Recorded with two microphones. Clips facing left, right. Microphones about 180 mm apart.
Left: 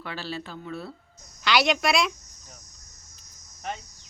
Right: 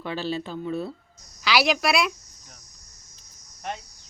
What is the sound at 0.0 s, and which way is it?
Speech, 20° right (ahead or behind).